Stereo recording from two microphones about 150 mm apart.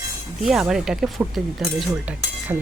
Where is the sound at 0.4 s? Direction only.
5° right (ahead or behind).